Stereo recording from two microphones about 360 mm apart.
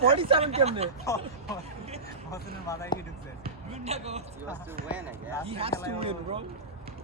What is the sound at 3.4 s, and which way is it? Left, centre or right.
Basketball bounce, centre.